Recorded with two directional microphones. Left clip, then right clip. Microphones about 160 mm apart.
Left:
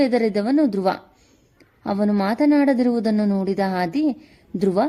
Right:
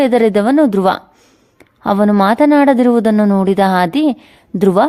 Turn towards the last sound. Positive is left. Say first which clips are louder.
# right 9 dB
turn(degrees=-40)  # may be behind; listen again after turning